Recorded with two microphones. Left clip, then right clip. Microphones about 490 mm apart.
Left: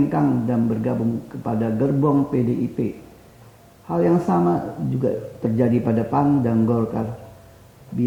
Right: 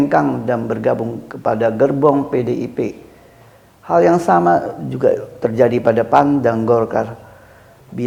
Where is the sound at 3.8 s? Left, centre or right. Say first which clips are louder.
Right 8 dB; right.